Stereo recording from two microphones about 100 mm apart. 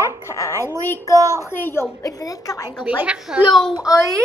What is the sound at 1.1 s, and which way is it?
Speech, 35° right (ahead or behind).